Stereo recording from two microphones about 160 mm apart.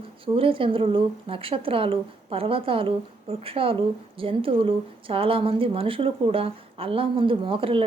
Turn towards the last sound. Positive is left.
turn(degrees=-35)  # may be behind; listen again after turning